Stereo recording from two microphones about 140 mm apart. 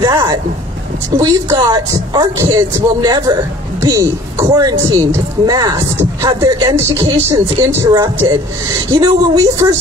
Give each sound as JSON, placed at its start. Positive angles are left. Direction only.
{"t": 0.0, "sound": "vehicle", "side_deg": -30}
{"t": 1.1, "sound": "speech", "side_deg": -30}